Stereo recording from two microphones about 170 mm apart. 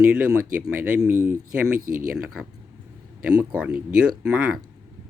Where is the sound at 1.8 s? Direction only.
55° right (ahead or behind).